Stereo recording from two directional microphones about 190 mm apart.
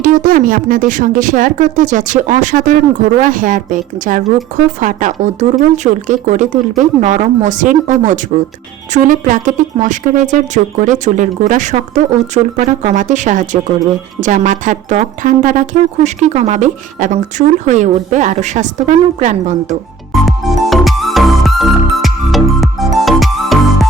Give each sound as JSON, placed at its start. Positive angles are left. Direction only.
{"t": 0.0, "sound": "speech", "side_deg": -45}
{"t": 20.2, "sound": "music", "side_deg": 0}